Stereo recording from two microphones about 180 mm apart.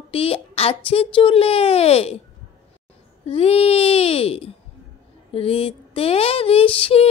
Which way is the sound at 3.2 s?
35° left (ahead or behind).